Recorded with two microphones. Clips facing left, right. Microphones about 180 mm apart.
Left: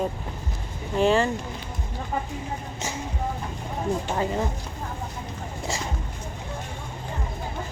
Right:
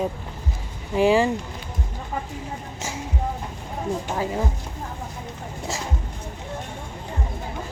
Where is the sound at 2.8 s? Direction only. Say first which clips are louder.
Right 1 dB; 10° right (ahead or behind).